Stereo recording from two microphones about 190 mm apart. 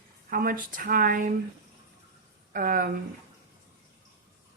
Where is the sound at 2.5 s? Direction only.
45° right (ahead or behind).